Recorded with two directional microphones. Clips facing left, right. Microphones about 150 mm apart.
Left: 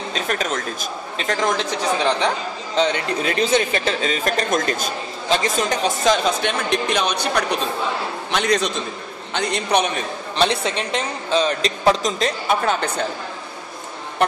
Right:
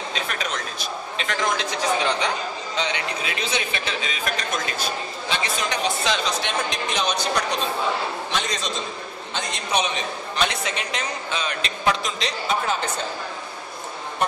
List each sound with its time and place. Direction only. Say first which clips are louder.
0.1 s a man's voice: left 7 dB; 45° left (ahead or behind)
2.8 s a man's voice: left 8 dB; 45° left (ahead or behind)
10.3 s a man's voice: left 6 dB; 30° left (ahead or behind); by 12.7 s 55° left (ahead or behind)